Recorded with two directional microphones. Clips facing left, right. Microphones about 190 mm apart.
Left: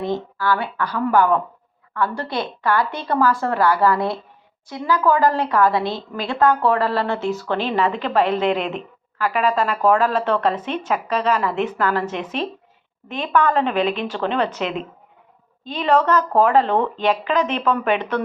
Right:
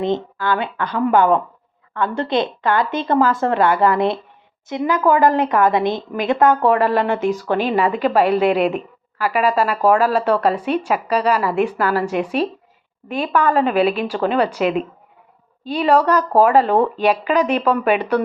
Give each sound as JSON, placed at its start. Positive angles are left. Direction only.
{"t": 0.0, "sound": "a woman's voice", "side_deg": -20}